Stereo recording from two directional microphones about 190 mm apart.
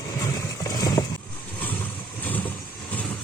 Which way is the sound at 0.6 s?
20° left (ahead or behind).